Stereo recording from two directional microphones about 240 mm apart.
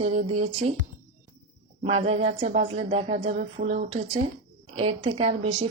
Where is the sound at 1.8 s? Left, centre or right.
Right.